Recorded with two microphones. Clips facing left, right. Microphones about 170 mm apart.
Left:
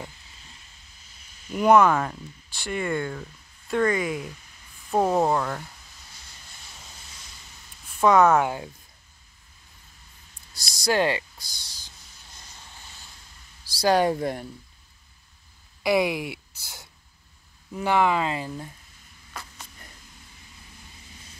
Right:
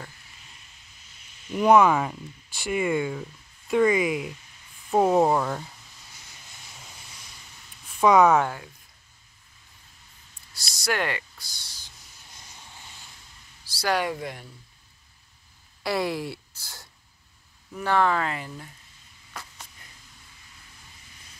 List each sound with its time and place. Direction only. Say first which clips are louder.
1.5 s speech: even; centre (ahead or behind)
4.9 s speech: right 2 dB; 10° right (ahead or behind)
8.0 s speech: even; centre (ahead or behind)
10.5 s speech: left 1 dB; 15° left (ahead or behind)
10.9 s speech: left 5 dB; 30° left (ahead or behind)
11.3 s speech: left 1 dB; 15° left (ahead or behind)
13.8 s speech: left 5 dB; 40° left (ahead or behind)
15.8 s speech: left 4 dB; 15° left (ahead or behind)